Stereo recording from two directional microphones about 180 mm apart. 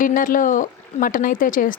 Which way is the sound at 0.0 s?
50° left (ahead or behind).